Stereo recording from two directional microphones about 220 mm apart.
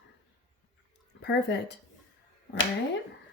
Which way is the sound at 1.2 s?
50° left (ahead or behind).